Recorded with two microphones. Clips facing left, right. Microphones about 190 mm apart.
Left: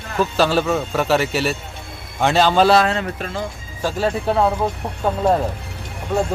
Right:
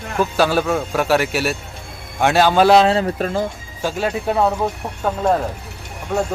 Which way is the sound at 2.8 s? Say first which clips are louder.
Right 5 dB; 30° right (ahead or behind).